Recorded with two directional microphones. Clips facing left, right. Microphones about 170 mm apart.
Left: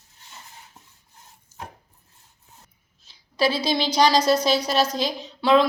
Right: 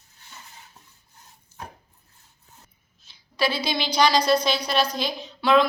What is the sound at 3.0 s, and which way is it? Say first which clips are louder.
A woman's voice: left 3 dB; 35° left (ahead or behind).